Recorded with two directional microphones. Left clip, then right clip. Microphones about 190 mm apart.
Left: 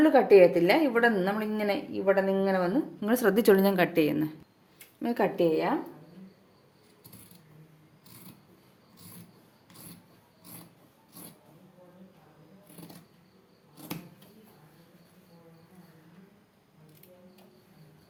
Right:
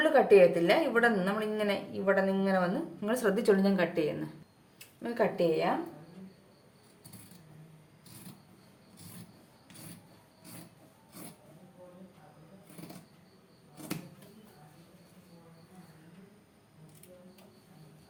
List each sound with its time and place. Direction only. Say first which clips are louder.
0.0 s a woman's voice: left 3 dB; 35° left (ahead or behind); by 5.6 s 50° left (ahead or behind)